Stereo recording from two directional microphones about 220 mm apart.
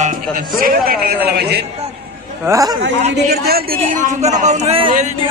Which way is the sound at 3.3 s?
45° right (ahead or behind).